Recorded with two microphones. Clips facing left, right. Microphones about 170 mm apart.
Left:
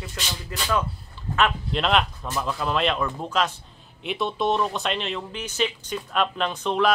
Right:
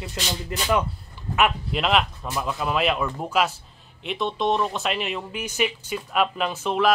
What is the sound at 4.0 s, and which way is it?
Speech, centre (ahead or behind).